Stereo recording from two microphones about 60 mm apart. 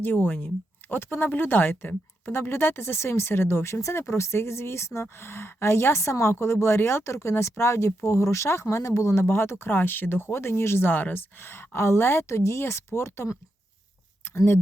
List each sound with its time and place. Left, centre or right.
0.0 s speech: left
9.2 s speech: left